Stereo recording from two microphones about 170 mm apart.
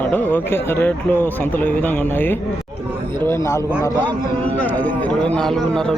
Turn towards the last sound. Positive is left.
turn(degrees=0)  # may be behind; listen again after turning